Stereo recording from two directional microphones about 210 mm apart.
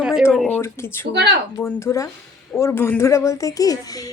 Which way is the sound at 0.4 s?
10° left (ahead or behind).